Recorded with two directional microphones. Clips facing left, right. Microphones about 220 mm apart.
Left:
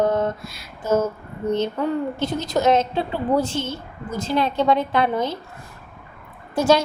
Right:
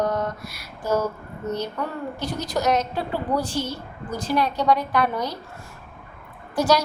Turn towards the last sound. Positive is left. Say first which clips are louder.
# left 3 dB
turn(degrees=25)  # may be behind; listen again after turning